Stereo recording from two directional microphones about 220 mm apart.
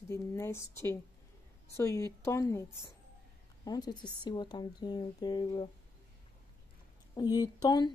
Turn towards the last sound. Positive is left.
turn(degrees=20)  # may be behind; listen again after turning